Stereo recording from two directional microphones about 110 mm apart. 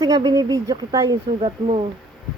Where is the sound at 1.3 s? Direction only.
65° right (ahead or behind).